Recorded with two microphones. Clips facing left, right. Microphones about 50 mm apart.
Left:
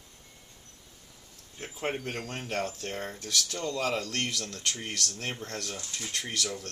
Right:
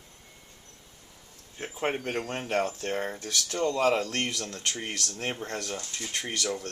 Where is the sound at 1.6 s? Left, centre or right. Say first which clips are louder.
Right 3 dB; centre.